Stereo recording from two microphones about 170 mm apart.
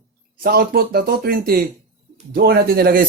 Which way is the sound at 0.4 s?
60° right (ahead or behind).